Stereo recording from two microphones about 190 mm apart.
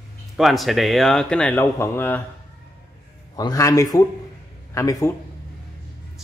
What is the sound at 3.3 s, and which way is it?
A man's voice, 20° left (ahead or behind).